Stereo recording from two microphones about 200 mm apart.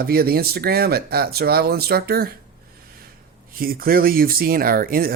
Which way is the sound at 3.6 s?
45° right (ahead or behind).